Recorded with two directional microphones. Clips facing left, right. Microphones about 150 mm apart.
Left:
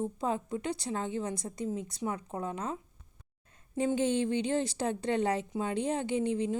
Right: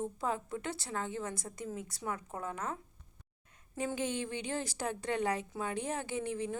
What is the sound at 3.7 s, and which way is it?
A woman's voice, 30° left (ahead or behind).